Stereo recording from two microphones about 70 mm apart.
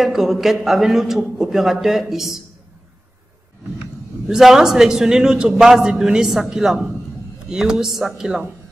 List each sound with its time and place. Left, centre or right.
0.0 s a man's voice: centre
4.3 s a man's voice: centre